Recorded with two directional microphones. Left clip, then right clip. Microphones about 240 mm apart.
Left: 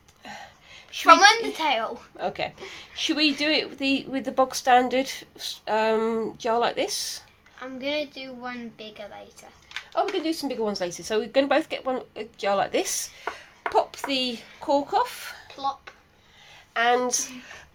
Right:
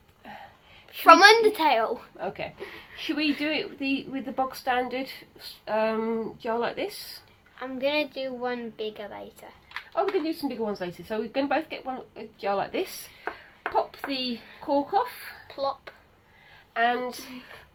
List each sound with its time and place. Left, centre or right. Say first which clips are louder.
1.0 s a woman's voice: right 1 dB; right
2.1 s a woman's voice: left 4 dB; left
7.6 s a woman's voice: right 2 dB; right
9.9 s a woman's voice: left 1 dB; left
15.5 s a woman's voice: even; right
16.7 s a woman's voice: left 4 dB; left